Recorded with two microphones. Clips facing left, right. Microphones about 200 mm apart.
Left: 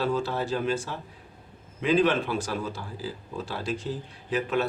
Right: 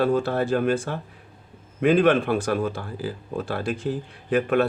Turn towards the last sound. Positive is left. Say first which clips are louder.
# right 6 dB
turn(degrees=-55)  # may be behind; listen again after turning